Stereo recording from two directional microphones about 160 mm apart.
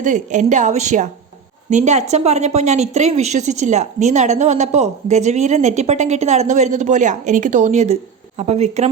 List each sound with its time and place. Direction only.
0.0 s a woman's voice: 50° right (ahead or behind)